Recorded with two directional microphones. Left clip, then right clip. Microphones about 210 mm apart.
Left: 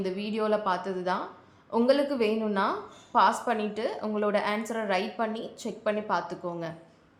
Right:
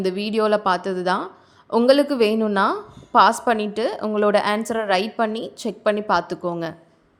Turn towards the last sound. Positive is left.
turn(degrees=-40)  # may be behind; listen again after turning